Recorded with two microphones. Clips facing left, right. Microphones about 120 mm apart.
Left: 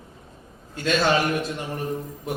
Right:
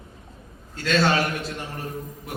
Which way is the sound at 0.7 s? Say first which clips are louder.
Even; 20° left (ahead or behind).